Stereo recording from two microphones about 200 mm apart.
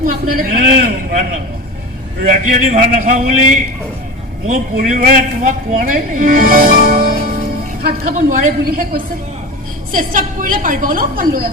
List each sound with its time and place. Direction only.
0.0 s a man's voice: 45° right (ahead or behind)
2.5 s a man's voice: 40° right (ahead or behind)
4.4 s a man's voice: 40° right (ahead or behind)